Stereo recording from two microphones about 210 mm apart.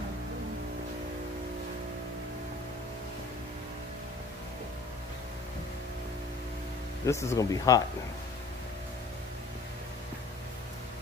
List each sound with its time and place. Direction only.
7.1 s speech: 15° left (ahead or behind)